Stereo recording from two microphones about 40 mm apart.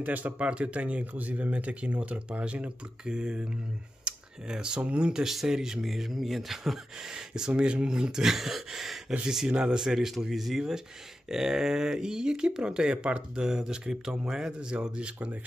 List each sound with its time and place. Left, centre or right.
0.0 s speech: right
0.4 s speech: right
5.1 s speech: centre
9.5 s speech: right
9.8 s speech: centre; by 13.2 s right
13.4 s speech: centre